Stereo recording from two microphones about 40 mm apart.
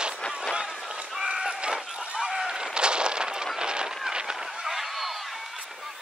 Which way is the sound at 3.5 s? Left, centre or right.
Right.